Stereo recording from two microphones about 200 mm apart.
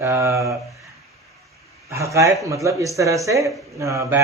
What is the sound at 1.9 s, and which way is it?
Speech, 15° right (ahead or behind).